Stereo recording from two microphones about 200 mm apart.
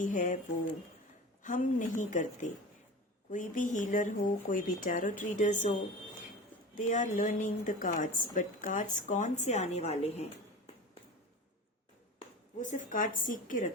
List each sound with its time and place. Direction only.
0.0 s a woman's voice: 40° left (ahead or behind)
1.5 s a woman's voice: 40° left (ahead or behind)
6.7 s a woman's voice: 40° left (ahead or behind)
12.5 s a woman's voice: 40° left (ahead or behind)